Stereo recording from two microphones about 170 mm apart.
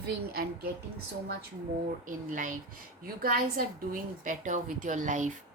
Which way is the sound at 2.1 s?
50° right (ahead or behind).